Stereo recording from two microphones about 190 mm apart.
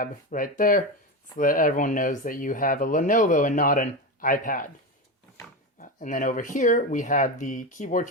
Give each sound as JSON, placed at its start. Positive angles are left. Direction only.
{"t": 0.0, "sound": "speech", "side_deg": 45}
{"t": 5.8, "sound": "speech", "side_deg": 45}